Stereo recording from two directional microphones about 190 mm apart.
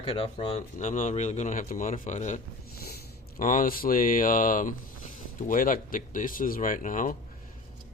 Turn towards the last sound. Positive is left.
turn(degrees=45)  # may be behind; listen again after turning